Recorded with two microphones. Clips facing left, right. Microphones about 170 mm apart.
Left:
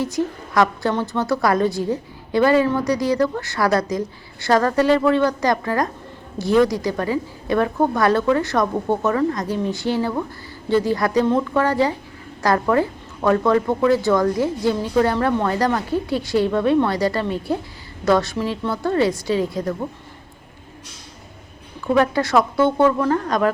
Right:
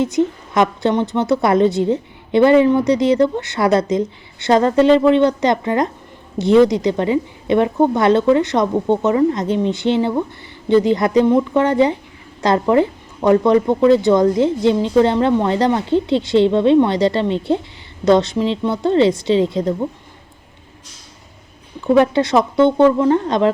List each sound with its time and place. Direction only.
0.0 s a woman's voice: 20° right (ahead or behind)
21.8 s a woman's voice: 25° right (ahead or behind)